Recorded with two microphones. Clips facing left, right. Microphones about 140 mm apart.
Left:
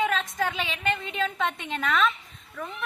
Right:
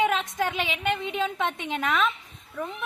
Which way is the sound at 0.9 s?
15° right (ahead or behind).